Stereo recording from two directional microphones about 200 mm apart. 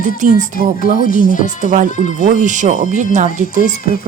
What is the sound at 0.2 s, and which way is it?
Speech, 40° right (ahead or behind).